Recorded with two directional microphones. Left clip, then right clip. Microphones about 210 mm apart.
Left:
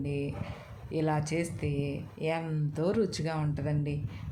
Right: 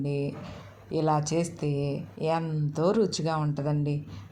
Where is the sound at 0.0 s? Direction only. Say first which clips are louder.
Right 4 dB; 20° right (ahead or behind).